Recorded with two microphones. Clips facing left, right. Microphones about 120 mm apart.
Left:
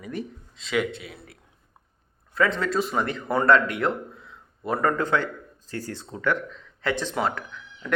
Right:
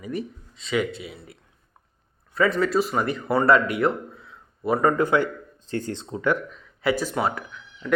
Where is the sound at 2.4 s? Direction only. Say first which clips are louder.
Right 3 dB; 5° right (ahead or behind).